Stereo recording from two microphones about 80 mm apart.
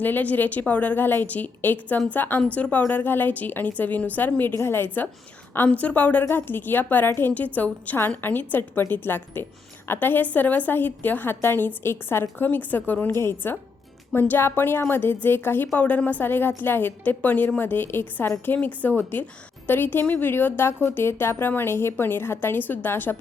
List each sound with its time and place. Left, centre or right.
0.0 s a woman's voice: left